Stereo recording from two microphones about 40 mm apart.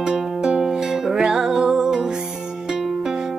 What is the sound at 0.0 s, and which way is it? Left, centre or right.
Music, centre.